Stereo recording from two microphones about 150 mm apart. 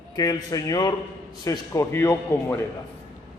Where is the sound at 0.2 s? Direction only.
25° left (ahead or behind).